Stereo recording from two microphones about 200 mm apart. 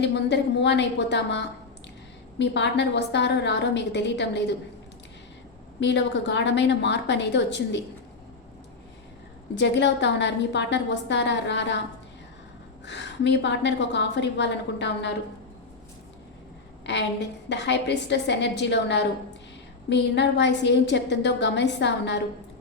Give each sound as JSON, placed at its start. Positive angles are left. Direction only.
{"t": 0.0, "sound": "a woman's voice", "side_deg": 60}
{"t": 5.8, "sound": "a woman's voice", "side_deg": 60}
{"t": 9.6, "sound": "a woman's voice", "side_deg": 60}
{"t": 12.8, "sound": "a woman's voice", "side_deg": 60}
{"t": 16.8, "sound": "a woman's voice", "side_deg": 60}